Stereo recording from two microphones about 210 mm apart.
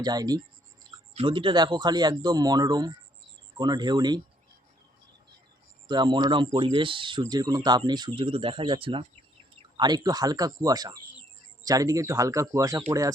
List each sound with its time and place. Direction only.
0.0 s speech: 20° right (ahead or behind)
5.9 s speech: 20° right (ahead or behind)